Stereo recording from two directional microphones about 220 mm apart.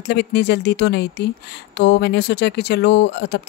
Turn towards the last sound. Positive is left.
turn(degrees=50)  # may be behind; listen again after turning